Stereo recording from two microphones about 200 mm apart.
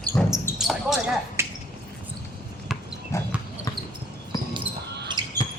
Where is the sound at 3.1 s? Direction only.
15° left (ahead or behind).